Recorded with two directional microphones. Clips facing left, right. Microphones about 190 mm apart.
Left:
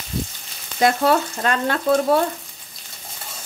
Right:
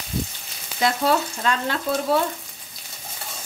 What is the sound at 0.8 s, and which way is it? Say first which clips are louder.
Speech: left 4 dB; 55° left (ahead or behind).